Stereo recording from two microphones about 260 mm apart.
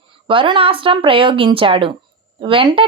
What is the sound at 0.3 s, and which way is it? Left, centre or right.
Speech, centre.